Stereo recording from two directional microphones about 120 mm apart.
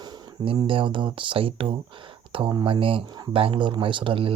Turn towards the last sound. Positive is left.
turn(degrees=-45)  # may be behind; listen again after turning